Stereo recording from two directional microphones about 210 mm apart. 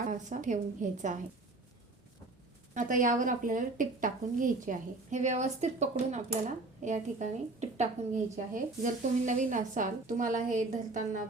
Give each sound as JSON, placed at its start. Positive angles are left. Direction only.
{"t": 0.0, "sound": "a woman's voice", "side_deg": -35}
{"t": 2.7, "sound": "a woman's voice", "side_deg": -40}